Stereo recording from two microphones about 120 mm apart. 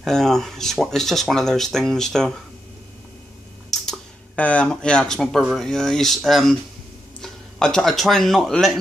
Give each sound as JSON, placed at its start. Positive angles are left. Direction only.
{"t": 0.0, "sound": "speech", "side_deg": 5}
{"t": 4.4, "sound": "speech", "side_deg": 10}